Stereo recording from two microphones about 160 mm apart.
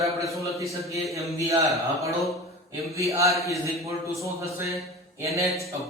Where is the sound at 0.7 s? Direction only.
20° right (ahead or behind).